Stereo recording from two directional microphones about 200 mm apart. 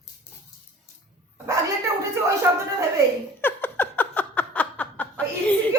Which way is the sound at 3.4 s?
10° left (ahead or behind).